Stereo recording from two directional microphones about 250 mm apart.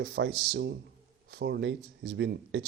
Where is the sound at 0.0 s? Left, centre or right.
Right.